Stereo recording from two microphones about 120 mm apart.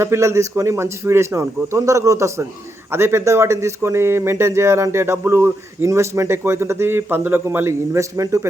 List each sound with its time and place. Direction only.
0.0 s speech: 20° right (ahead or behind)